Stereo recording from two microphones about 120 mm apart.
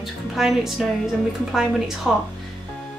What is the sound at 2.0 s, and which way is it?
Speech, centre (ahead or behind).